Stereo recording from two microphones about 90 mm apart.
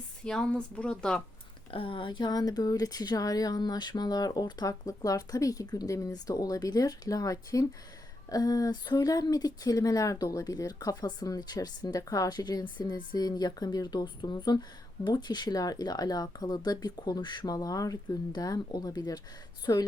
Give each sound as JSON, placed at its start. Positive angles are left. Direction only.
{"t": 0.3, "sound": "speech", "side_deg": 10}
{"t": 1.7, "sound": "speech", "side_deg": 80}